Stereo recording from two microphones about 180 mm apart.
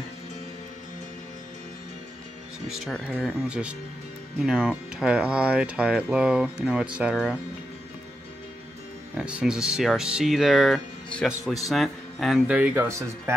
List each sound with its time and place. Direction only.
2.8 s speech: centre (ahead or behind)
9.1 s speech: 5° right (ahead or behind)